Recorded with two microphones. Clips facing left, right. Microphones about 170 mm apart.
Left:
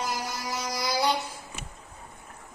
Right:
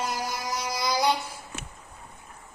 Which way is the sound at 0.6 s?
25° right (ahead or behind).